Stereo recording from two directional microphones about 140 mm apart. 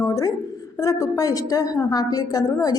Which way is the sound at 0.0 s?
20° left (ahead or behind).